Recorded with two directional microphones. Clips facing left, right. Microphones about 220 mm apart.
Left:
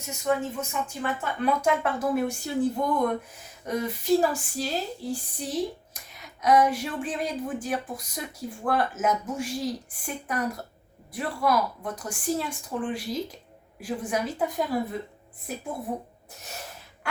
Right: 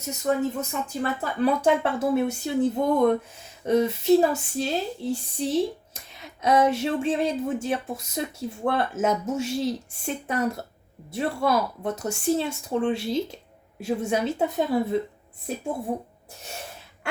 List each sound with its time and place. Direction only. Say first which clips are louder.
0.3 s speech: right 2 dB; 45° right (ahead or behind); by 15.6 s 25° right (ahead or behind)